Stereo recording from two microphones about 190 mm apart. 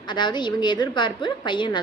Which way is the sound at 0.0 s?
25° left (ahead or behind).